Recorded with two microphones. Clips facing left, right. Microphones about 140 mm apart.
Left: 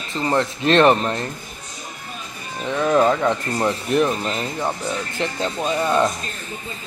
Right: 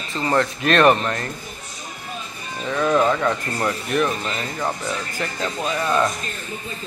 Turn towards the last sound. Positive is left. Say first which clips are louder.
# left 2 dB
turn(degrees=20)  # may be behind; listen again after turning